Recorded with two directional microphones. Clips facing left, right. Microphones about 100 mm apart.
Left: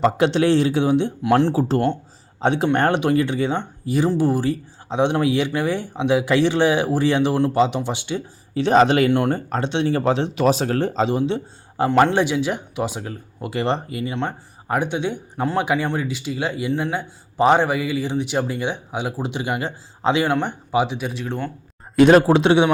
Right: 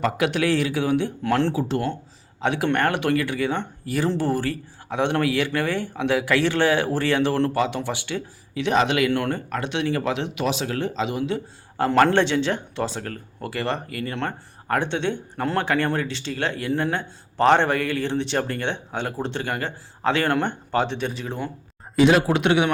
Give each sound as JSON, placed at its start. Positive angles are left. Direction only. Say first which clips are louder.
{"t": 0.0, "sound": "a man's voice", "louder": "left 5 dB", "side_deg": 25}
{"t": 1.5, "sound": "a man's voice", "louder": "left 5 dB", "side_deg": 40}
{"t": 8.5, "sound": "speech", "louder": "left 5 dB", "side_deg": 35}
{"t": 9.1, "sound": "speech", "louder": "left 4 dB", "side_deg": 25}
{"t": 12.1, "sound": "a man's voice", "louder": "even", "side_deg": 10}
{"t": 13.5, "sound": "a man's voice", "louder": "left 5 dB", "side_deg": 20}
{"t": 14.0, "sound": "a man's voice", "louder": "left 3 dB", "side_deg": 10}
{"t": 20.2, "sound": "speech", "louder": "left 1 dB", "side_deg": 5}
{"t": 21.9, "sound": "speech", "louder": "left 5 dB", "side_deg": 50}
{"t": 22.3, "sound": "a man's voice", "louder": "left 5 dB", "side_deg": 25}